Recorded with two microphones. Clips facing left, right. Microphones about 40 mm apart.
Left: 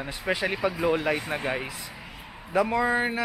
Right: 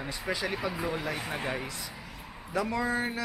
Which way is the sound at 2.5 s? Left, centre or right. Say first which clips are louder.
Left 6 dB; left.